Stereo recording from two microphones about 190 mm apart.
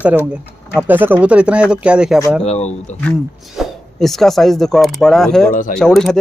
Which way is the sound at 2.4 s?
35° left (ahead or behind).